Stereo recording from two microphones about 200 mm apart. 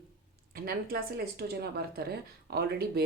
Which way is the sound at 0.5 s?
50° right (ahead or behind).